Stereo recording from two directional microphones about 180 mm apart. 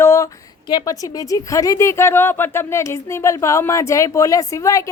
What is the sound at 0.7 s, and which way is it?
A woman's voice, 20° left (ahead or behind).